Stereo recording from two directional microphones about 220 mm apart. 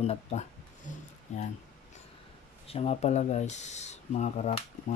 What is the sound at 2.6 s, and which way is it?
Speech, 25° left (ahead or behind).